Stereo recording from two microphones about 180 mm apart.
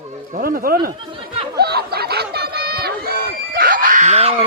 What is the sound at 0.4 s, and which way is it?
Speech, 60° right (ahead or behind).